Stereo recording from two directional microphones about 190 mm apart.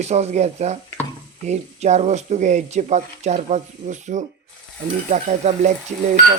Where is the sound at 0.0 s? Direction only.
35° right (ahead or behind).